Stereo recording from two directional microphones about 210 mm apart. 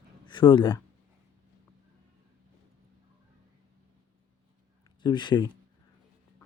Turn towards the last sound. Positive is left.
turn(degrees=20)  # may be behind; listen again after turning